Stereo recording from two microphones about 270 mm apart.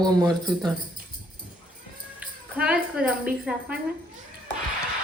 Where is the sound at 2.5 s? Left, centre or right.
Centre.